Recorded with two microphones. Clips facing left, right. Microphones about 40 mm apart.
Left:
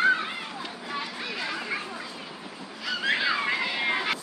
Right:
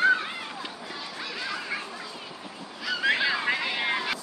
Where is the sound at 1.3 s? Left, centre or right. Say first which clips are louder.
Even; centre.